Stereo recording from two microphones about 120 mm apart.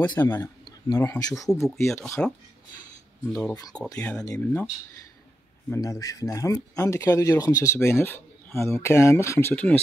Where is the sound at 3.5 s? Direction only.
30° left (ahead or behind).